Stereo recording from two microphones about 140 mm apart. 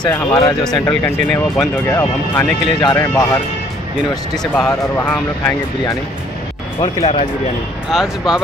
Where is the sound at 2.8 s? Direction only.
30° left (ahead or behind).